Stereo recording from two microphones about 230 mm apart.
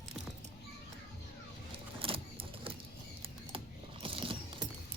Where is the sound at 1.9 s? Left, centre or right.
Right.